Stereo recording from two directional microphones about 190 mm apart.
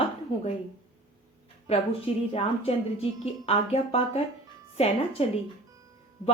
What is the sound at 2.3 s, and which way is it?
A woman's voice, 30° left (ahead or behind).